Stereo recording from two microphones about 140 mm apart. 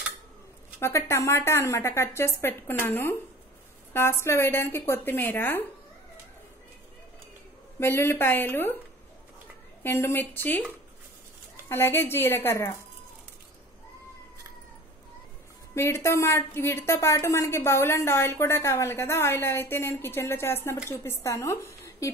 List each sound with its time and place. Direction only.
0.7 s a woman's voice: 20° left (ahead or behind)
7.8 s a woman's voice: 20° left (ahead or behind)
9.8 s a woman's voice: 15° left (ahead or behind)
11.7 s a woman's voice: 15° left (ahead or behind)
15.7 s a woman's voice: 20° left (ahead or behind)